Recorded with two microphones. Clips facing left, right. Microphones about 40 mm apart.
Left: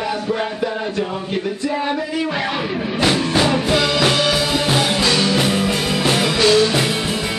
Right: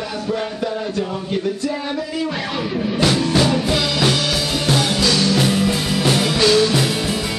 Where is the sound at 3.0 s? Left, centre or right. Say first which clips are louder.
Left 1 dB; centre.